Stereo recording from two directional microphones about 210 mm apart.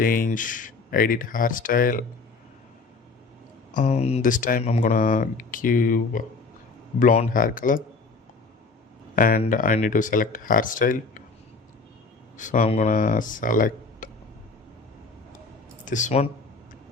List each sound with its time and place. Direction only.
0.0 s speech: 40° left (ahead or behind)
3.8 s speech: 30° left (ahead or behind)
9.1 s speech: 40° left (ahead or behind)
12.4 s speech: 35° left (ahead or behind)
15.8 s speech: 35° left (ahead or behind)